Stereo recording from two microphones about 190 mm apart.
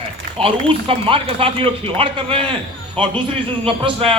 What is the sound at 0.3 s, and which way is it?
Speech, 30° right (ahead or behind).